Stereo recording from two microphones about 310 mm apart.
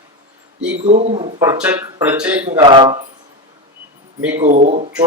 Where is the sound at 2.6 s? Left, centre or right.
Centre.